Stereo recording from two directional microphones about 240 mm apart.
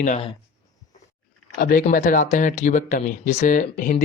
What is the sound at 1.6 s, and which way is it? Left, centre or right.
Speech, left.